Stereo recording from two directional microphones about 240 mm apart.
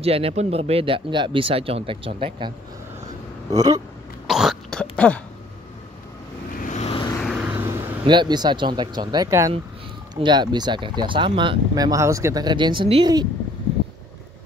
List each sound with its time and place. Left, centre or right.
0.0 s speech: right
3.5 s speech: centre
4.3 s throat clearing: centre
6.6 s vehicle: left
7.2 s vehicle: centre
8.1 s speech: centre